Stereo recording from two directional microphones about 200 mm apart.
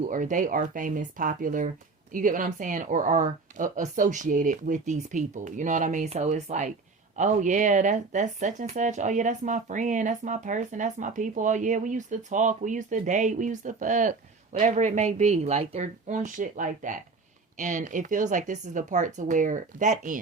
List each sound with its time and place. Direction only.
0.1 s speech: 40° right (ahead or behind)